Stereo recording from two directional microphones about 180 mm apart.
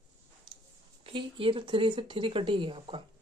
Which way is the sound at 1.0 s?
30° right (ahead or behind).